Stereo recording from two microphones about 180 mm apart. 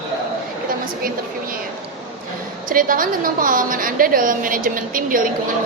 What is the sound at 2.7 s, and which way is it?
A woman's voice, 50° right (ahead or behind).